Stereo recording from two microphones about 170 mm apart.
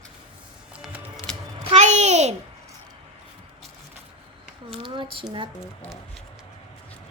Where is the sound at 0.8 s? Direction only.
5° right (ahead or behind).